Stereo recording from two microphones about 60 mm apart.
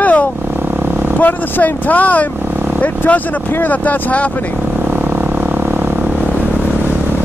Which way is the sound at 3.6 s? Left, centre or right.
Left.